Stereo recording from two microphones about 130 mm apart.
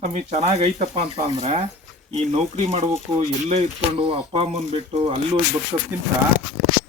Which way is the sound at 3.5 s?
45° right (ahead or behind).